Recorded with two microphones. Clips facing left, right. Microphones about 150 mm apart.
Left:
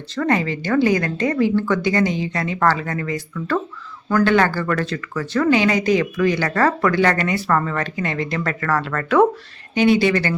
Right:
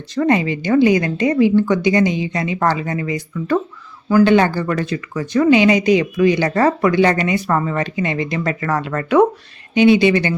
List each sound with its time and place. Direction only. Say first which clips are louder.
0.1 s speech: right 4 dB; 15° right (ahead or behind)